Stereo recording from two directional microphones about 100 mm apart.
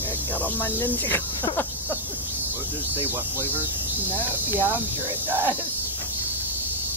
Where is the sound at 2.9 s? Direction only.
20° right (ahead or behind).